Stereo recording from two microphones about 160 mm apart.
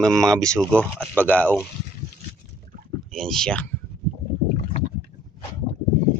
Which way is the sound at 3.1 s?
5° left (ahead or behind).